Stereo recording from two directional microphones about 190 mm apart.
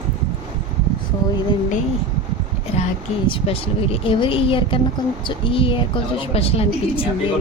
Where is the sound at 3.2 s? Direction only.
30° left (ahead or behind).